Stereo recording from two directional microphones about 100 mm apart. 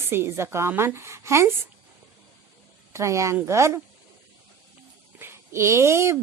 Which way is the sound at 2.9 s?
30° right (ahead or behind).